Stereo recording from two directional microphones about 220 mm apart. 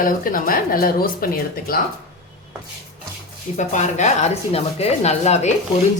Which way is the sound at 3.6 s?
35° left (ahead or behind).